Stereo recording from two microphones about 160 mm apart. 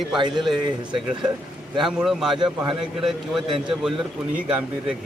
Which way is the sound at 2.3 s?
30° right (ahead or behind).